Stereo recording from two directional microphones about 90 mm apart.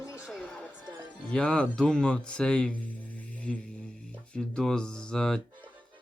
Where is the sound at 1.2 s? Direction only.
10° left (ahead or behind).